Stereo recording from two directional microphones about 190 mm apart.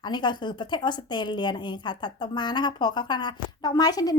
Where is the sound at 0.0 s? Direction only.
25° left (ahead or behind).